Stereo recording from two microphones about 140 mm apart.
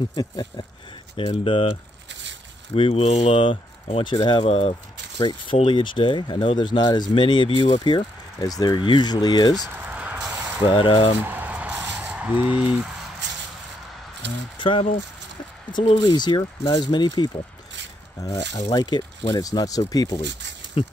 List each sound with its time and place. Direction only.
0.1 s speech: 30° left (ahead or behind)
1.1 s speech: 40° left (ahead or behind)
2.7 s speech: 45° left (ahead or behind)
4.0 s speech: 35° left (ahead or behind)
9.8 s a sound: 10° right (ahead or behind)
10.6 s speech: 35° left (ahead or behind)
11.2 s a sound: 10° right (ahead or behind)
14.6 s speech: 35° left (ahead or behind)
18.7 s speech: 30° left (ahead or behind)
20.8 s speech: 40° left (ahead or behind)